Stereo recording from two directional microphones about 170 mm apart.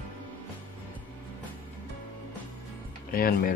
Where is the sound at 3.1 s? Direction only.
55° left (ahead or behind).